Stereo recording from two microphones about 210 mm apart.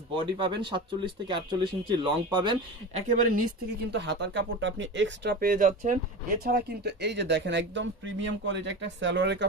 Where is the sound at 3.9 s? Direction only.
55° right (ahead or behind).